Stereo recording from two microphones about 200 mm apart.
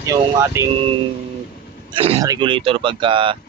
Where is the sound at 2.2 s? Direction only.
20° right (ahead or behind).